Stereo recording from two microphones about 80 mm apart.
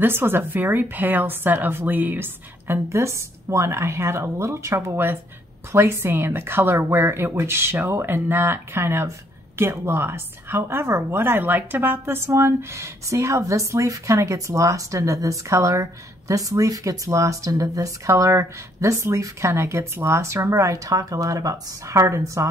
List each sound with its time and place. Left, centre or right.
0.0 s a woman's voice: right